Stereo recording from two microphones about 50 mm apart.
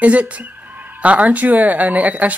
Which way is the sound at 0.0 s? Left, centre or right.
Right.